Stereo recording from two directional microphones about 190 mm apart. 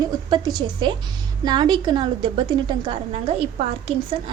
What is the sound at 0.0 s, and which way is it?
A woman's voice, 20° right (ahead or behind).